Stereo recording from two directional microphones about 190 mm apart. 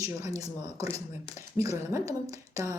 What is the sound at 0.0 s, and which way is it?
Speech, 15° right (ahead or behind).